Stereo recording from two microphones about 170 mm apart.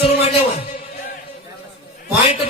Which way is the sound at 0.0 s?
35° left (ahead or behind).